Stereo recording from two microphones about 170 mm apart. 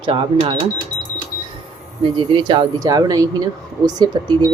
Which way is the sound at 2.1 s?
25° right (ahead or behind).